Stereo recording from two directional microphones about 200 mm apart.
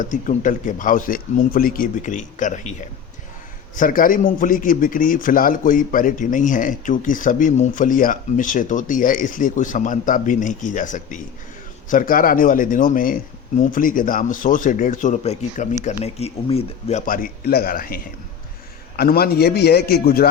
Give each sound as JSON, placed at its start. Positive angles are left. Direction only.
{"t": 0.0, "sound": "a man's voice", "side_deg": 40}
{"t": 3.8, "sound": "a man's voice", "side_deg": 45}
{"t": 17.1, "sound": "a man's voice", "side_deg": 45}